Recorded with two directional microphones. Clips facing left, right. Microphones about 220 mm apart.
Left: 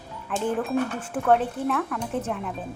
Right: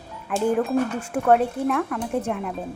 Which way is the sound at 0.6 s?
10° right (ahead or behind).